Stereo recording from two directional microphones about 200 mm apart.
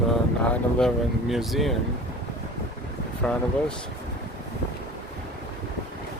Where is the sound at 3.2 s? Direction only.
5° left (ahead or behind).